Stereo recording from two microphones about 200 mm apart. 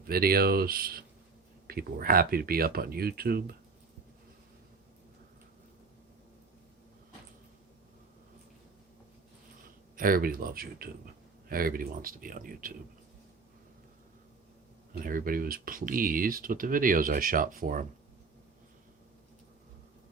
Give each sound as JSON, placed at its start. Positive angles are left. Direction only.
{"t": 0.1, "sound": "speech", "side_deg": -50}
{"t": 10.0, "sound": "speech", "side_deg": -45}
{"t": 15.0, "sound": "speech", "side_deg": -45}